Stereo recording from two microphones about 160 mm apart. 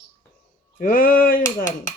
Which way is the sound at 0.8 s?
60° left (ahead or behind).